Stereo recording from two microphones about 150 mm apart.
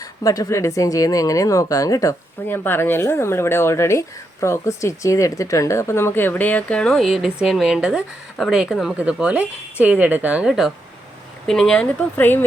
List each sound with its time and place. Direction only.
0.2 s speech: 25° left (ahead or behind)